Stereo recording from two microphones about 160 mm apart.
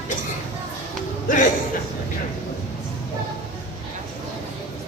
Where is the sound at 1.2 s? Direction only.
55° left (ahead or behind).